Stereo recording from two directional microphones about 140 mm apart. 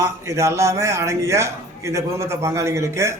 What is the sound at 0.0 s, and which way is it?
Speech, 20° right (ahead or behind).